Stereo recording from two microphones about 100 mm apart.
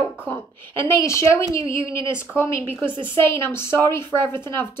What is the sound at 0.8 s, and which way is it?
A woman's voice, 30° left (ahead or behind).